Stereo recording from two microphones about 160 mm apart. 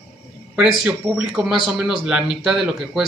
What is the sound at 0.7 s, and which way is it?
Speech, 5° right (ahead or behind).